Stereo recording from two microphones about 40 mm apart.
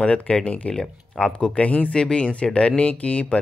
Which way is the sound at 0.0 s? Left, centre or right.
Left.